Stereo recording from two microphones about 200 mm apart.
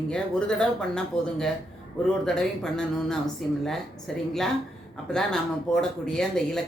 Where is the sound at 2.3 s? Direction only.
5° left (ahead or behind).